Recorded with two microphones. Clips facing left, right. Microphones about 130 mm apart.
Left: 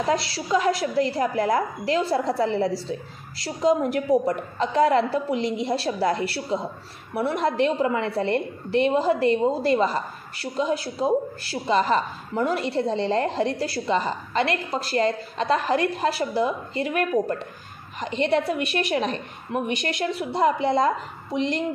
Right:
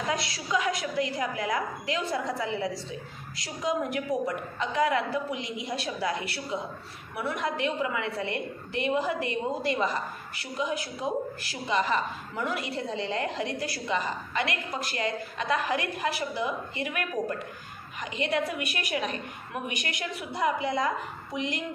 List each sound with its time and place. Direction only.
0.1 s a woman's voice: 30° left (ahead or behind)